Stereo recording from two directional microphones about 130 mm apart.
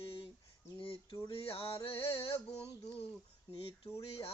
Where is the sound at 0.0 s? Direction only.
45° left (ahead or behind).